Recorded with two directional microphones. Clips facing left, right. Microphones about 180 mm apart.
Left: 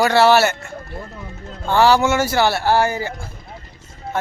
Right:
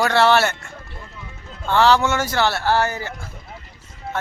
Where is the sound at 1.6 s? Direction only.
10° left (ahead or behind).